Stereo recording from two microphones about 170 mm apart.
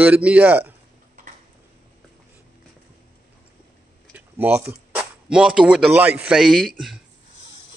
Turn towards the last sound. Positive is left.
turn(degrees=0)  # may be behind; listen again after turning